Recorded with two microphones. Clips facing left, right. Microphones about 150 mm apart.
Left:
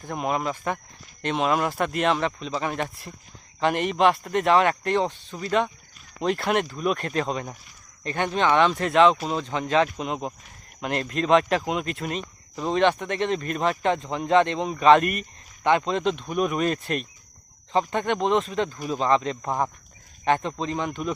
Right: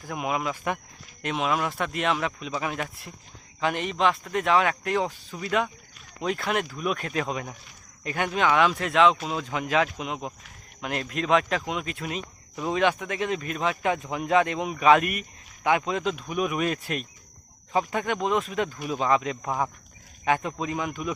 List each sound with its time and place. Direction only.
0.3 s speech: 35° left (ahead or behind)
1.2 s speech: 5° right (ahead or behind)